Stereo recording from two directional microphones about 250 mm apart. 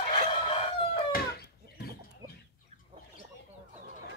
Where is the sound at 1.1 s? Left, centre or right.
Left.